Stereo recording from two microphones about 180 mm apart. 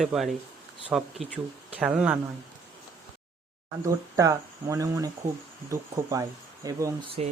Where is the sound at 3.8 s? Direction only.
20° right (ahead or behind).